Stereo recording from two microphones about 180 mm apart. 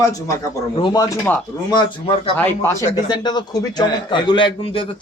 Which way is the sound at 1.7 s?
25° left (ahead or behind).